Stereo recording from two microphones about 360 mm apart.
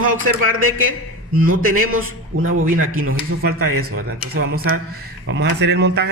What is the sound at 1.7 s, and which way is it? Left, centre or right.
A man's voice, right.